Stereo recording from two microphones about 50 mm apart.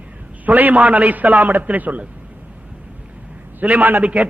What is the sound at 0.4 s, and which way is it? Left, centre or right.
A man's voice, right.